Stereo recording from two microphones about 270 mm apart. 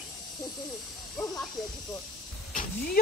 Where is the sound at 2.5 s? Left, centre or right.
Left.